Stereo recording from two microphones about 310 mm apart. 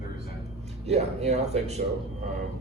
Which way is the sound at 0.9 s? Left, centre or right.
Right.